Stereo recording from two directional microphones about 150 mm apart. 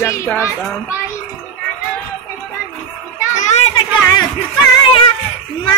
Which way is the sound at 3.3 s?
50° left (ahead or behind).